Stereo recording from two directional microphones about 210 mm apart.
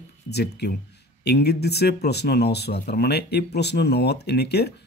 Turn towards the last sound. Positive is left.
turn(degrees=50)  # may be behind; listen again after turning